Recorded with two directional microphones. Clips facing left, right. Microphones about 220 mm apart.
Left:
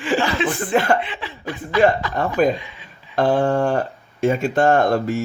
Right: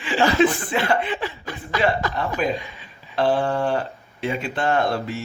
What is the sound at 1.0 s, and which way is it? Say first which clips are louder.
Chuckle: right 3 dB; 45° right (ahead or behind).